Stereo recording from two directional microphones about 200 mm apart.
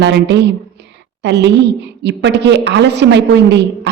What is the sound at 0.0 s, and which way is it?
A woman's voice, 60° right (ahead or behind).